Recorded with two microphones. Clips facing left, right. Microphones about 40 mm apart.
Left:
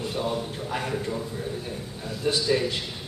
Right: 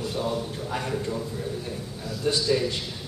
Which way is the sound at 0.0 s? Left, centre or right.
Centre.